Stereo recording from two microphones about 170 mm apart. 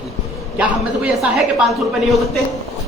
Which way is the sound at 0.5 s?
10° right (ahead or behind).